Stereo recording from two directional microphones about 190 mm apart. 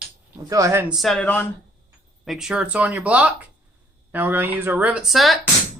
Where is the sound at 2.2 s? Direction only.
Centre (ahead or behind).